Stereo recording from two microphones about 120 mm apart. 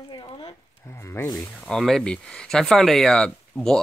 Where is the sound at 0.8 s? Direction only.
20° left (ahead or behind).